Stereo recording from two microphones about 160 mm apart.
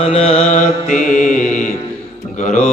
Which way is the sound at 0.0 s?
40° left (ahead or behind).